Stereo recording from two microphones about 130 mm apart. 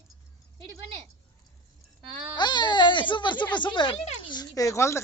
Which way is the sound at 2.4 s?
35° left (ahead or behind).